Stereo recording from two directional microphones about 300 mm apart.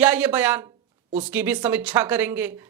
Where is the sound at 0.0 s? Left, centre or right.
Centre.